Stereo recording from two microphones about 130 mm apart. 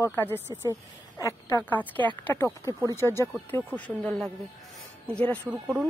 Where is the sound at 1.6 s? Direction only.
10° left (ahead or behind).